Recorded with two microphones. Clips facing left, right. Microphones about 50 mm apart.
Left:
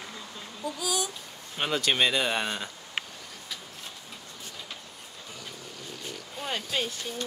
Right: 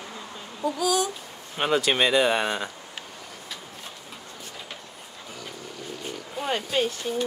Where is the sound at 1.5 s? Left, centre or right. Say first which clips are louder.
Right 4 dB; centre.